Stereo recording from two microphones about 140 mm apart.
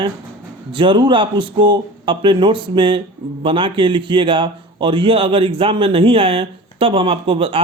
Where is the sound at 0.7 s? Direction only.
35° right (ahead or behind).